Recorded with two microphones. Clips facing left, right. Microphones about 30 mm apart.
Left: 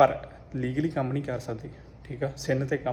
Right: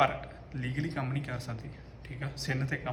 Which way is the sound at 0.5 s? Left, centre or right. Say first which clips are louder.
Left 8 dB; right.